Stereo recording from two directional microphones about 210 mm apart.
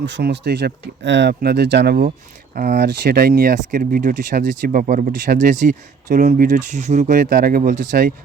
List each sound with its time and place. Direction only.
0.0 s speech: 55° right (ahead or behind)